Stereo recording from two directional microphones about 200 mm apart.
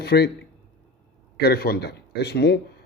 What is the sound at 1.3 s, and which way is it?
A man's voice, 55° left (ahead or behind).